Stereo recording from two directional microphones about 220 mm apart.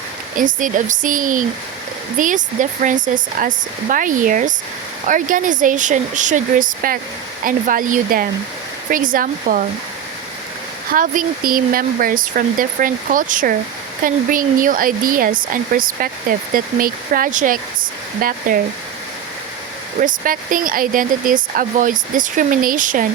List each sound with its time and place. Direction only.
0.3 s speech: 35° right (ahead or behind)
10.9 s speech: 40° right (ahead or behind)
20.0 s speech: 40° right (ahead or behind)